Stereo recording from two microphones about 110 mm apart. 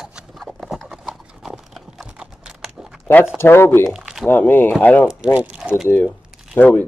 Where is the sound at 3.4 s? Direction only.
20° left (ahead or behind).